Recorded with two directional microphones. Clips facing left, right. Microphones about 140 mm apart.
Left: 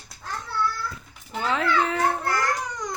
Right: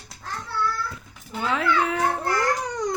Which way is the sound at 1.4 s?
5° right (ahead or behind).